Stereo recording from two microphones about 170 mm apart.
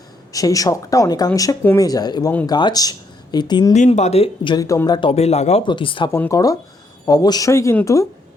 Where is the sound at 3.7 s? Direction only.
45° left (ahead or behind).